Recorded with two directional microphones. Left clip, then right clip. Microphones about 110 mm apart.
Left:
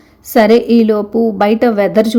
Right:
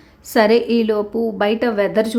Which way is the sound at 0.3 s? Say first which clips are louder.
Left 5 dB; 25° left (ahead or behind).